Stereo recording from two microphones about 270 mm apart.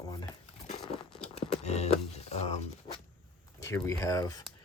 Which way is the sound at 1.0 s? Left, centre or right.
Centre.